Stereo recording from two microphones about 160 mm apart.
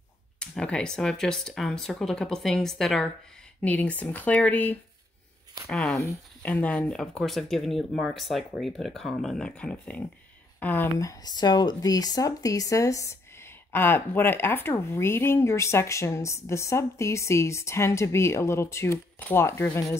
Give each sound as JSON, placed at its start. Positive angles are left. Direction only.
{"t": 0.4, "sound": "speech", "side_deg": 5}